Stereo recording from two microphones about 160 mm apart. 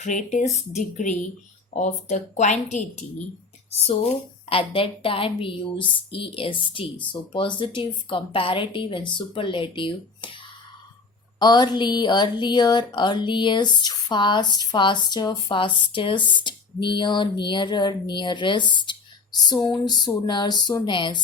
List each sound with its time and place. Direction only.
0.0 s a woman's voice: 50° left (ahead or behind); by 10.3 s 30° left (ahead or behind)
11.3 s speech: 25° left (ahead or behind)